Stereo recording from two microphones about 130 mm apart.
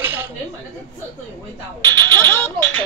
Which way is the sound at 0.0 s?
15° right (ahead or behind).